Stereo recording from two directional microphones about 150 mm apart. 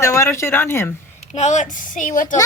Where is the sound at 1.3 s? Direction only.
50° left (ahead or behind).